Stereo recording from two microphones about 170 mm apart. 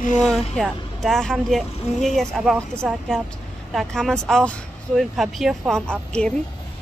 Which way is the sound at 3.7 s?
Centre (ahead or behind).